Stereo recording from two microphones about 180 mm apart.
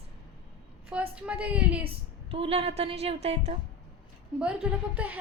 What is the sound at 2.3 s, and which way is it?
A woman's voice, 30° right (ahead or behind).